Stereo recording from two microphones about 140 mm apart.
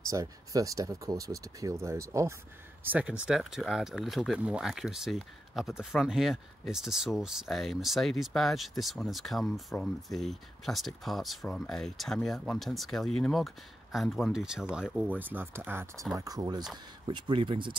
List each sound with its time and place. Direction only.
0.0 s speech: 25° right (ahead or behind)
2.9 s speech: 10° right (ahead or behind)
16.2 s speech: 25° right (ahead or behind)